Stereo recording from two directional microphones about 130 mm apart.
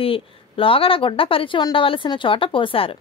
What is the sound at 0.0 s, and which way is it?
A woman's voice, 45° left (ahead or behind).